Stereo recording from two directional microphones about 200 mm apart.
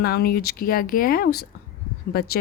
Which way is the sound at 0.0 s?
50° left (ahead or behind).